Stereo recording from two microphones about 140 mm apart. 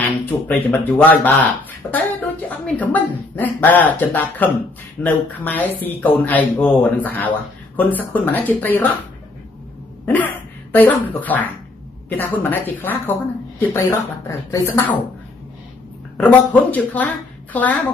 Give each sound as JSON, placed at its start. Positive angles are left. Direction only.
{"t": 0.5, "sound": "speech", "side_deg": 10}
{"t": 10.0, "sound": "a sound", "side_deg": 10}
{"t": 11.1, "sound": "speech", "side_deg": 10}
{"t": 16.2, "sound": "speech", "side_deg": 10}